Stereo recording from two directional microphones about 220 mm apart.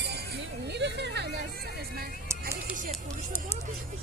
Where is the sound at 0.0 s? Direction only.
50° right (ahead or behind).